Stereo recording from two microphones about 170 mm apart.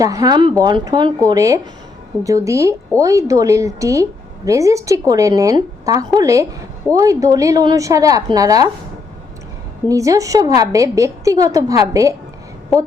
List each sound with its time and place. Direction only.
0.0 s a woman's voice: 20° right (ahead or behind)
9.9 s a woman's voice: 20° right (ahead or behind)